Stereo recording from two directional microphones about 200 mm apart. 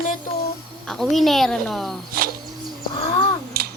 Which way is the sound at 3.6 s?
50° right (ahead or behind).